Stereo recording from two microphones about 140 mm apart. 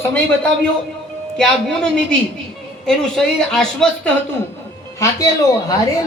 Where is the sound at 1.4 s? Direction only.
5° left (ahead or behind).